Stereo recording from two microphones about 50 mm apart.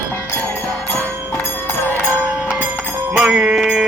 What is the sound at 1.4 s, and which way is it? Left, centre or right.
Music, left.